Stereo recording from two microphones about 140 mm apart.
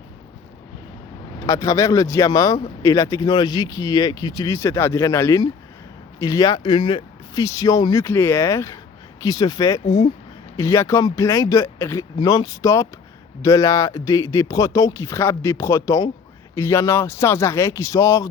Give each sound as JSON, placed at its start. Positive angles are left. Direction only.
{"t": 1.5, "sound": "speech", "side_deg": 25}
{"t": 7.4, "sound": "speech", "side_deg": 25}